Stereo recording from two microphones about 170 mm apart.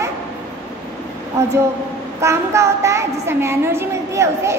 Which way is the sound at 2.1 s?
15° right (ahead or behind).